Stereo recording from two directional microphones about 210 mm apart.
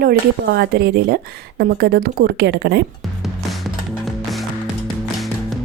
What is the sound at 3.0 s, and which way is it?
Music, centre (ahead or behind).